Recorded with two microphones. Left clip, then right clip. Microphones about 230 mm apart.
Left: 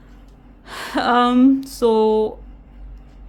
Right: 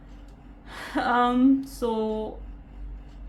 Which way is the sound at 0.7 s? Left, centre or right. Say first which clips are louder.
Left 7 dB; left.